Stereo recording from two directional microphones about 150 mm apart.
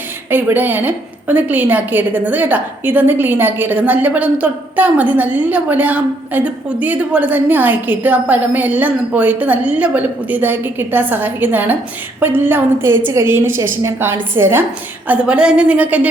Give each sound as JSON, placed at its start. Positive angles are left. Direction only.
{"t": 0.3, "sound": "a woman's voice", "side_deg": -15}